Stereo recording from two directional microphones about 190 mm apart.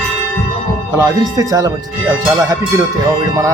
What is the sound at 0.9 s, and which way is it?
Speech, 15° right (ahead or behind).